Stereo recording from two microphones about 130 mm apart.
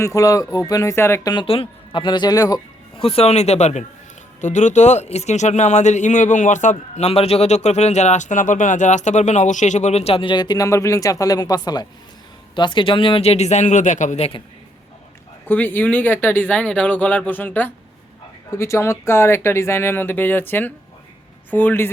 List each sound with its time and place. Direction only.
0.0 s speech: 25° left (ahead or behind)
1.3 s speech: 40° left (ahead or behind)
3.0 s speech: 50° left (ahead or behind); by 14.3 s 70° left (ahead or behind)
15.4 s speech: 15° left (ahead or behind)